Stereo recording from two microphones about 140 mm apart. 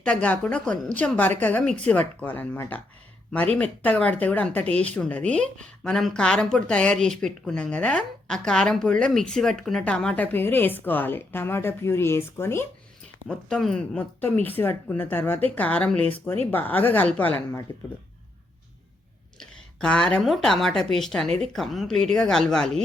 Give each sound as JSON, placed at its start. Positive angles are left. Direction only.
{"t": 0.0, "sound": "speech", "side_deg": 10}
{"t": 13.2, "sound": "speech", "side_deg": 0}
{"t": 19.4, "sound": "speech", "side_deg": 5}